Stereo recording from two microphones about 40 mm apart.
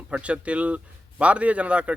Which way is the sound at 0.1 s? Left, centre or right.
Right.